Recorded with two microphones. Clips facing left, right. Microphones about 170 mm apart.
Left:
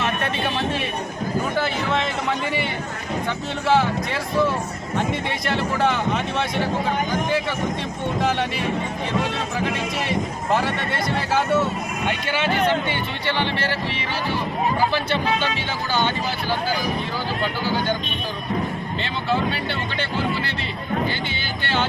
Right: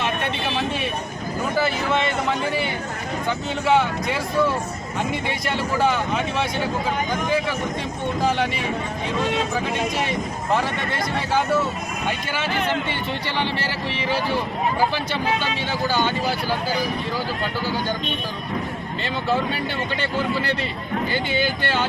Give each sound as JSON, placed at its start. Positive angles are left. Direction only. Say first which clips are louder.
{"t": 1.5, "sound": "speech", "louder": "right 5 dB", "side_deg": 0}
{"t": 15.9, "sound": "speech", "louder": "left 1 dB", "side_deg": -10}
{"t": 21.3, "sound": "speech", "louder": "right 5 dB", "side_deg": -40}